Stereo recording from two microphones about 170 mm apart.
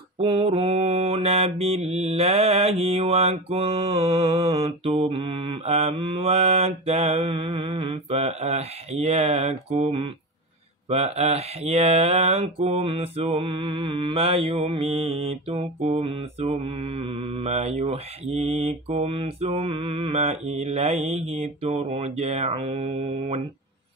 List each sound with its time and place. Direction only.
0.2 s speech: 30° right (ahead or behind)